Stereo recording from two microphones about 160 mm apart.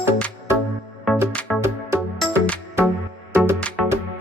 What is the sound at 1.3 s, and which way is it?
Music, 10° left (ahead or behind).